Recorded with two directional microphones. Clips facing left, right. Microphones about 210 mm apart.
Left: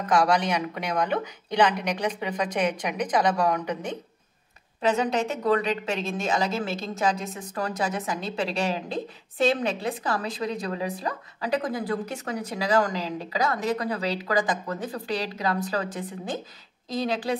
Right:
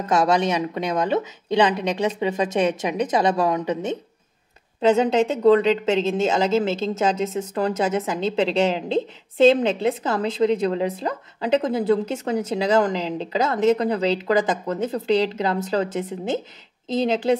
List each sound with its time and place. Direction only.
0.1 s a woman's voice: 25° right (ahead or behind)